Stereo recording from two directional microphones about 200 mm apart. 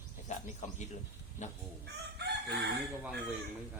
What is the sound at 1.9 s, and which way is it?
Chicken, 55° right (ahead or behind).